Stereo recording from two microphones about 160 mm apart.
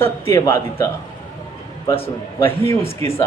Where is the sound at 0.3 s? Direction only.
15° left (ahead or behind).